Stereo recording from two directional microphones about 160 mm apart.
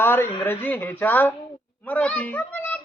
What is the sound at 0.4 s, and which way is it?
Speech, 15° left (ahead or behind).